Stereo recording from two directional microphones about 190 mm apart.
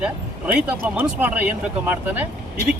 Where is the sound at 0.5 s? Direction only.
10° right (ahead or behind).